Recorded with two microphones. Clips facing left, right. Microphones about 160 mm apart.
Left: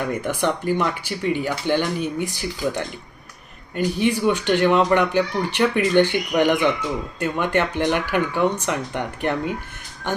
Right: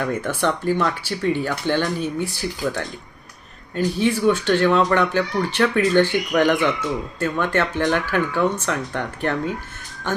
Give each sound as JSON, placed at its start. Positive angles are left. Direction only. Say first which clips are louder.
{"t": 0.0, "sound": "speech", "louder": "right 1 dB", "side_deg": 15}